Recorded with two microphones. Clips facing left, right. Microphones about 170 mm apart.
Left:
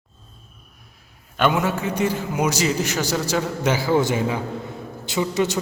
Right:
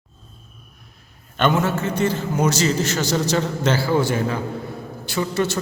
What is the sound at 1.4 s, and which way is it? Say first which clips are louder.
A man's voice: right 1 dB; 10° left (ahead or behind).